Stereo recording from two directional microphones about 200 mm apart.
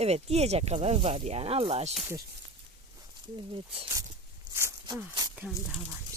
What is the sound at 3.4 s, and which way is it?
Speech, 25° right (ahead or behind).